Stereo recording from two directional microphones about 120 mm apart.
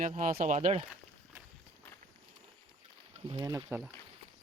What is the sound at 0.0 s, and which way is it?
Speech, 90° right.